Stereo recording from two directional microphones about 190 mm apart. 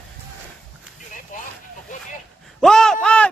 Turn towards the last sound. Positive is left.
turn(degrees=5)  # may be behind; listen again after turning